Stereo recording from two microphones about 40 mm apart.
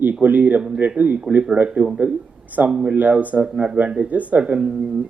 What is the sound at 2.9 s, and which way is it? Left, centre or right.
Speech, right.